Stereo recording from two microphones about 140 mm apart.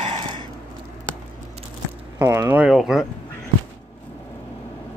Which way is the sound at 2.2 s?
20° right (ahead or behind).